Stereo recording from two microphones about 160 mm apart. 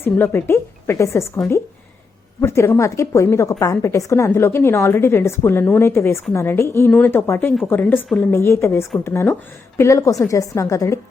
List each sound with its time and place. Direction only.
0.0 s a woman's voice: 15° left (ahead or behind)
2.4 s a woman's voice: 15° left (ahead or behind)